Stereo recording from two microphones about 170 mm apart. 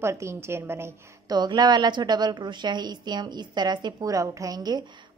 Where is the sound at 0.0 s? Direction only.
15° right (ahead or behind).